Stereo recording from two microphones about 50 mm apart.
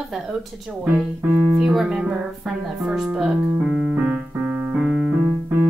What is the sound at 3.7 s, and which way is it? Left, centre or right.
Keyboard, centre.